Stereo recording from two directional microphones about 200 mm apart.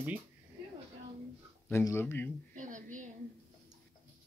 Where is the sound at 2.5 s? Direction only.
40° right (ahead or behind).